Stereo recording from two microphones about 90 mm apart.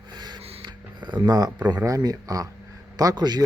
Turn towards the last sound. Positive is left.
turn(degrees=-50)  # may be behind; listen again after turning